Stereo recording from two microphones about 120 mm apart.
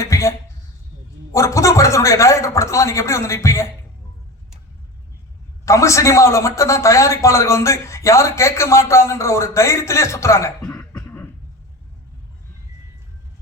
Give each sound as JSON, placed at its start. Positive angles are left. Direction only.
{"t": 0.0, "sound": "a sound", "side_deg": 25}
{"t": 1.3, "sound": "a man's voice", "side_deg": 25}
{"t": 5.6, "sound": "a man's voice", "side_deg": 25}
{"t": 10.9, "sound": "cough", "side_deg": 20}